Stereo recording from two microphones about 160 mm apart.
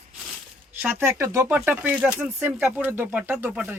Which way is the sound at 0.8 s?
15° right (ahead or behind).